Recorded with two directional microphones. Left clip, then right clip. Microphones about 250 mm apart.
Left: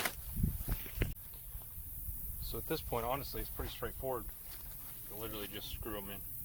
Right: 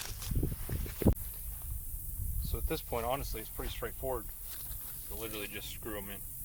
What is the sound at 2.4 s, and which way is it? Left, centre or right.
Speech, centre.